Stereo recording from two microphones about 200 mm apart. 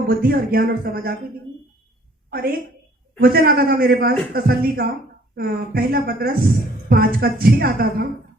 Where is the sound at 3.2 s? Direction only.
50° right (ahead or behind).